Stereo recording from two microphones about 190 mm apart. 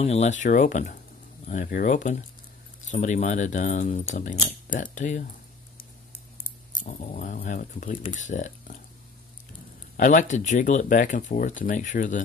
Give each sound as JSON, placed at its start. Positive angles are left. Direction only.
{"t": 0.0, "sound": "speech", "side_deg": 35}
{"t": 6.8, "sound": "speech", "side_deg": 40}
{"t": 9.9, "sound": "speech", "side_deg": 40}